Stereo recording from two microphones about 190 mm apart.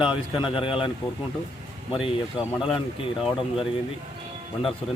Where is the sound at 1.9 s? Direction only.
30° left (ahead or behind).